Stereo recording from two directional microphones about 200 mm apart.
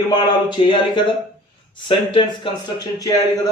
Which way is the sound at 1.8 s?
25° left (ahead or behind).